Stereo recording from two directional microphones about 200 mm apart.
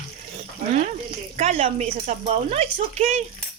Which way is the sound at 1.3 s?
30° right (ahead or behind).